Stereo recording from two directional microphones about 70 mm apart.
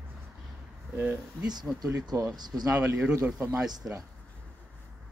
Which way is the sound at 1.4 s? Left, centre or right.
Right.